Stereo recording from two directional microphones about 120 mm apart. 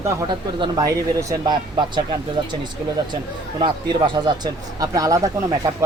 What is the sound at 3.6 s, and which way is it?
Speech, 40° right (ahead or behind).